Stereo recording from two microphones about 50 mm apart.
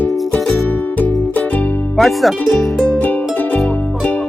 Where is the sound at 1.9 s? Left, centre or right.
Centre.